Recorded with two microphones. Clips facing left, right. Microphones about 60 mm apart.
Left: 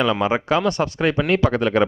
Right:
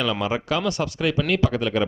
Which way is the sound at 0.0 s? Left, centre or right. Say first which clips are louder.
Left 5 dB; left.